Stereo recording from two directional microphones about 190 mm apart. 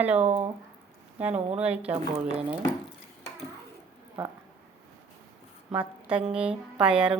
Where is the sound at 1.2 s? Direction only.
10° right (ahead or behind).